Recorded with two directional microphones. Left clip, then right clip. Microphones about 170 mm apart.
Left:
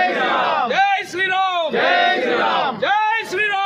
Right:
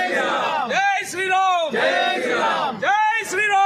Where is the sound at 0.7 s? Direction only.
90° left.